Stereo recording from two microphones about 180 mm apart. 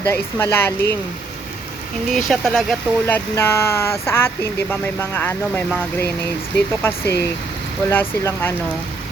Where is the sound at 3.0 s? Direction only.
15° left (ahead or behind).